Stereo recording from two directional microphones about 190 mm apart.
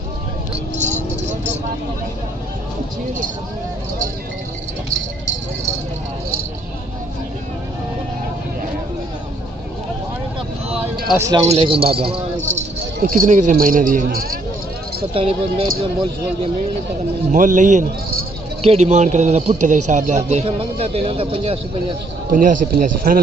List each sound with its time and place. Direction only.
0.7 s vehicle: 40° right (ahead or behind)
11.1 s speech: 15° right (ahead or behind)
11.4 s speech: 30° right (ahead or behind); by 14.4 s 50° right (ahead or behind)
15.1 s speech: 30° right (ahead or behind)
17.3 s a man's voice: 40° right (ahead or behind)
22.3 s speech: 45° right (ahead or behind)